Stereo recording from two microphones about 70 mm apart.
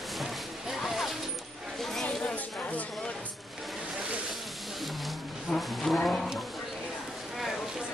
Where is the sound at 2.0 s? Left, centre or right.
Left.